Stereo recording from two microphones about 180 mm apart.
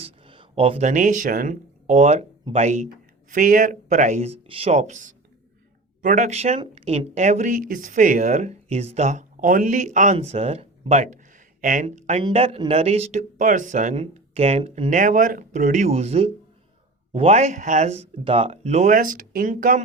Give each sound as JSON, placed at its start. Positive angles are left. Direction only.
{"t": 0.0, "sound": "speech", "side_deg": -30}
{"t": 14.9, "sound": "speech", "side_deg": -45}